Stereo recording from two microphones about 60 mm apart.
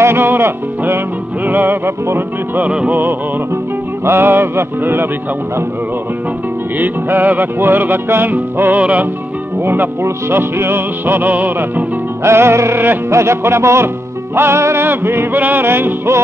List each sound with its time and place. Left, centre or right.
0.0 s music: right
2.9 s music: right
6.8 s music: right
9.6 s music: right
12.2 s music: right
13.1 s music: right